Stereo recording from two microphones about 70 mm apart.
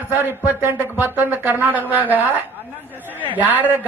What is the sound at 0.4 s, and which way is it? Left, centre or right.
Speech, right.